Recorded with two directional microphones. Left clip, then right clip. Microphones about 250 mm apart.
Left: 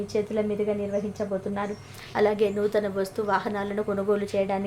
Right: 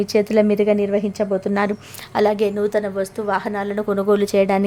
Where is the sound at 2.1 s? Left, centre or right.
Right.